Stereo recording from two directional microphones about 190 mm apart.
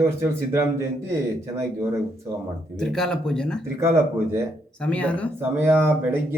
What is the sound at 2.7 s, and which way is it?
Speech, 5° left (ahead or behind).